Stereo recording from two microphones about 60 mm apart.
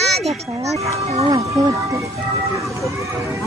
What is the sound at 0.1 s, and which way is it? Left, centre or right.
Children playing, centre.